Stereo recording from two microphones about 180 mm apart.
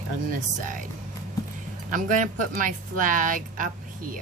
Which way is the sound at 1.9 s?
45° right (ahead or behind).